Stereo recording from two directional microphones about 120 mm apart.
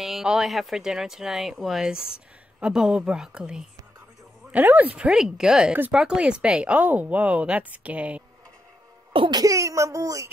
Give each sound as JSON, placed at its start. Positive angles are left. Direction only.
{"t": 0.0, "sound": "speech", "side_deg": -5}
{"t": 9.1, "sound": "cough", "side_deg": -45}
{"t": 9.4, "sound": "speech", "side_deg": -25}